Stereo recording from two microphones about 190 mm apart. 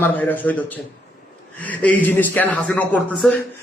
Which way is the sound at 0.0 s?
10° left (ahead or behind).